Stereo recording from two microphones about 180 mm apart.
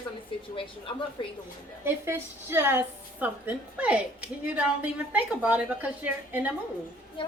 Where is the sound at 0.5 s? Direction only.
30° left (ahead or behind).